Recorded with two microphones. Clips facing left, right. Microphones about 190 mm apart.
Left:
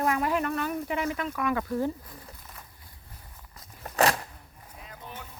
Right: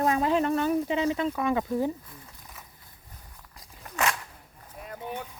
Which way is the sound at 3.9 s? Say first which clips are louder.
Left 5 dB; 35° left (ahead or behind).